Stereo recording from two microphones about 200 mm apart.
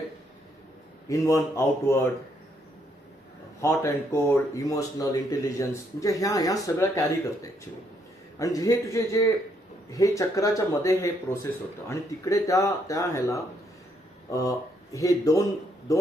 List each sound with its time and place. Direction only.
1.0 s speech: 15° left (ahead or behind)
3.6 s speech: 15° left (ahead or behind)
8.4 s speech: 15° left (ahead or behind)